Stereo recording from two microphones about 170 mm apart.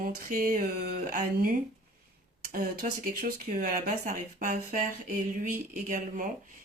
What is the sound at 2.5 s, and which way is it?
Speech, 55° right (ahead or behind).